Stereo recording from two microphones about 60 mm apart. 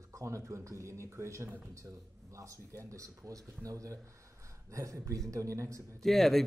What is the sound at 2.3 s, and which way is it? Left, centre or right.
Speech, right.